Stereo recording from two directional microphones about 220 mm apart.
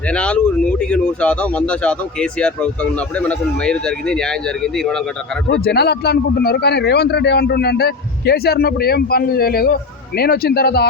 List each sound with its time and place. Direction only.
0.1 s a man's voice: 5° left (ahead or behind)
5.5 s a man's voice: 45° left (ahead or behind)